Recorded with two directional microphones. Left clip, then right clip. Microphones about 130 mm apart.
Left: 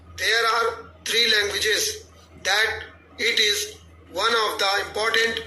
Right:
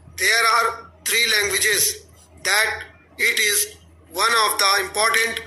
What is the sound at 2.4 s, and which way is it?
A man's voice, 40° right (ahead or behind).